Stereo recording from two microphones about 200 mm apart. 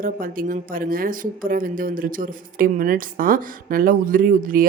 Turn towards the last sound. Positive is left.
turn(degrees=-45)  # may be behind; listen again after turning